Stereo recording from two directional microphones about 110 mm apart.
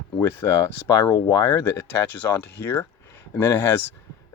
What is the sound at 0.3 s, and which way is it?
Speech, 25° left (ahead or behind).